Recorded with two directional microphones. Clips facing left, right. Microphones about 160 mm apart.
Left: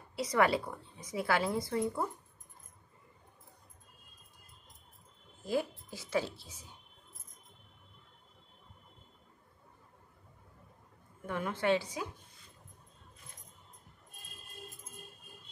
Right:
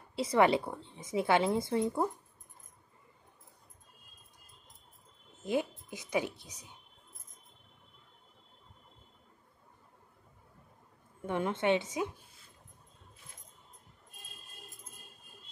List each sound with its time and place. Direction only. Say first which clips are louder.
0.1 s a woman's voice: right 3 dB; 25° right (ahead or behind)
5.4 s speech: right 1 dB; 20° right (ahead or behind)
11.2 s a woman's voice: right 2 dB; 25° right (ahead or behind)